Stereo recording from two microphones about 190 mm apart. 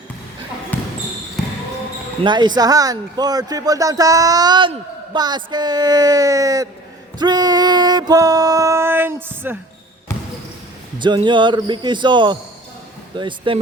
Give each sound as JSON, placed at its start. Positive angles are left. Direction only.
{"t": 2.2, "sound": "speech", "side_deg": -25}
{"t": 10.9, "sound": "speech", "side_deg": -25}